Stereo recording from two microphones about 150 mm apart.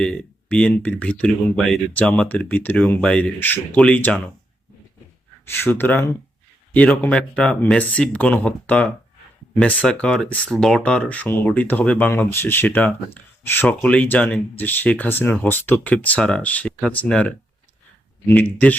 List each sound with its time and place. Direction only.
0.0 s speech: 5° left (ahead or behind)
5.5 s speech: 15° left (ahead or behind)